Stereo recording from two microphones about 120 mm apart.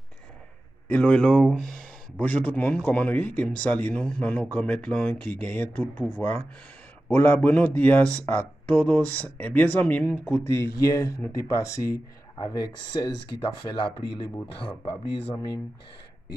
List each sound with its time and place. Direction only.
0.8 s speech: 10° left (ahead or behind); by 13.1 s 35° left (ahead or behind)
14.5 s speech: 50° left (ahead or behind)
15.3 s speech: 35° left (ahead or behind)